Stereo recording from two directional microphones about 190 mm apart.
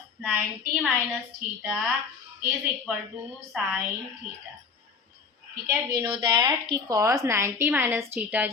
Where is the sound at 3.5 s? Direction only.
Centre (ahead or behind).